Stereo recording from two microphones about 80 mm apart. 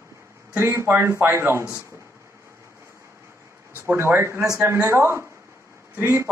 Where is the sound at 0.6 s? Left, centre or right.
Right.